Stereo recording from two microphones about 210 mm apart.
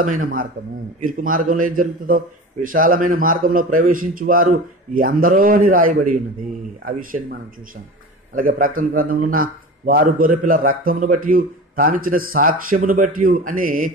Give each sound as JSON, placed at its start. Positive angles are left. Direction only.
{"t": 0.0, "sound": "a man's voice", "side_deg": -40}
{"t": 8.4, "sound": "a man's voice", "side_deg": -40}